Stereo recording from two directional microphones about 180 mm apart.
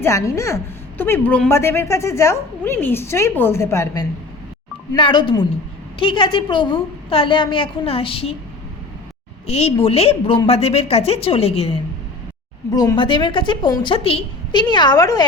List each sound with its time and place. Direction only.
0.0 s a woman's voice: 15° left (ahead or behind)
4.9 s a woman's voice: 25° left (ahead or behind)
9.5 s a woman's voice: 35° left (ahead or behind)
12.7 s a woman's voice: 20° left (ahead or behind)